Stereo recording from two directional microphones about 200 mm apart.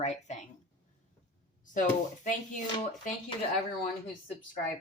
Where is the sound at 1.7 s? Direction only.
40° left (ahead or behind).